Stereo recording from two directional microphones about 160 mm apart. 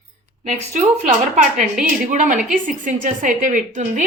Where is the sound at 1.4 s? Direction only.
50° right (ahead or behind).